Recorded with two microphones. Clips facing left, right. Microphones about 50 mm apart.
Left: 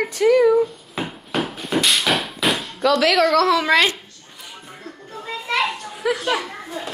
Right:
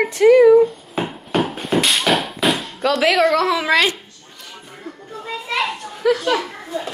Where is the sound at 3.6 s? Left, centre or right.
Centre.